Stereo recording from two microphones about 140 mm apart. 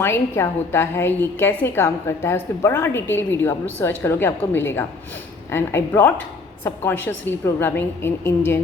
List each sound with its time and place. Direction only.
0.0 s a woman's voice: 20° left (ahead or behind)